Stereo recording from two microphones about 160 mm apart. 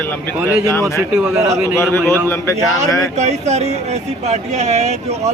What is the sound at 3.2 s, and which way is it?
Speech, 45° right (ahead or behind).